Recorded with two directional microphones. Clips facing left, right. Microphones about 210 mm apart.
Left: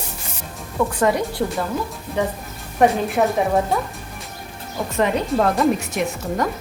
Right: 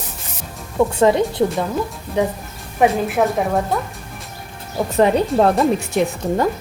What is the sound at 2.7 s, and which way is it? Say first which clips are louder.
A woman's voice: right 1 dB; centre (ahead or behind).